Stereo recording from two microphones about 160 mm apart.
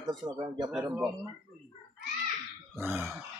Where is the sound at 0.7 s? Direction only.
5° right (ahead or behind).